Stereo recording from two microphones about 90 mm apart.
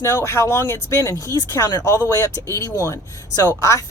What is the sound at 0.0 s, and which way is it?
Speech, 30° left (ahead or behind).